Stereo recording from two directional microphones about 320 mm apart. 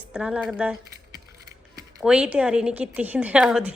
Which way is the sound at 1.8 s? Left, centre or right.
Centre.